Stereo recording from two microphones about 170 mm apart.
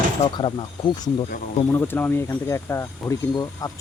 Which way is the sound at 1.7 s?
10° left (ahead or behind).